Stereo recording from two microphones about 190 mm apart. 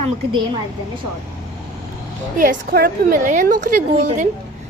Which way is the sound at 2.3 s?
45° right (ahead or behind).